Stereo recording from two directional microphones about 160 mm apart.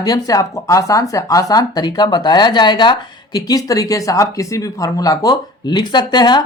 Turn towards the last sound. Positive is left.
turn(degrees=25)  # may be behind; listen again after turning